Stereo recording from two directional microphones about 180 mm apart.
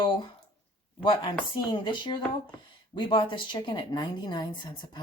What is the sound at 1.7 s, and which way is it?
A woman's voice, 25° left (ahead or behind).